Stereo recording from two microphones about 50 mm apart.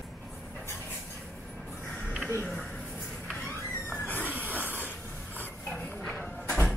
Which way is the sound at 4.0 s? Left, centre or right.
Left.